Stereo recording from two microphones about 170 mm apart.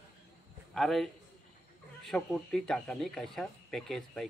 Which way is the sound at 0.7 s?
Centre (ahead or behind).